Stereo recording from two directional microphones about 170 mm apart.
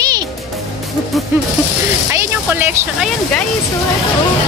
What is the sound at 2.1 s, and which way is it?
Vehicle, 15° right (ahead or behind).